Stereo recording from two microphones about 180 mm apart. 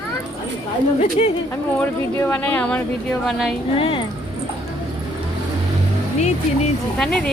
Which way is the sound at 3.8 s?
30° left (ahead or behind).